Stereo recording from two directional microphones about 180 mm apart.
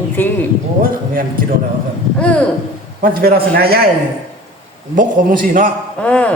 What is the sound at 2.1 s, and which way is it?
Speech, 5° left (ahead or behind).